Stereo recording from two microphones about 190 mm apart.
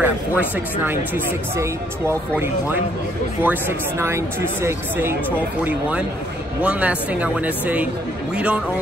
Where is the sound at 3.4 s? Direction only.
10° right (ahead or behind).